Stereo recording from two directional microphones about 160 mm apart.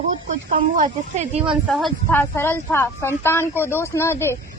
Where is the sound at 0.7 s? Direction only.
50° right (ahead or behind).